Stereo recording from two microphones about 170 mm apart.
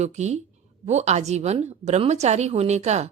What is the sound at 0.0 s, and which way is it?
A woman's voice, 40° right (ahead or behind).